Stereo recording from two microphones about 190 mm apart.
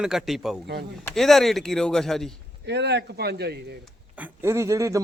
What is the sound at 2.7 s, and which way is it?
Speech, 65° right (ahead or behind).